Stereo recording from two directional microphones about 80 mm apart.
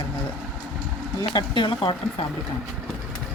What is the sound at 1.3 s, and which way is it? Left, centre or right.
Speech, left.